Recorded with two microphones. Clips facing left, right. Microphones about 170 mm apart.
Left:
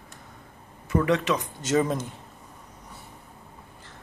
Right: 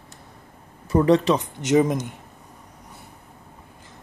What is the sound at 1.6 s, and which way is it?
Speech, 20° right (ahead or behind).